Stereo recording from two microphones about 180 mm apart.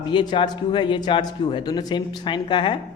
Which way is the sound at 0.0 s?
25° left (ahead or behind).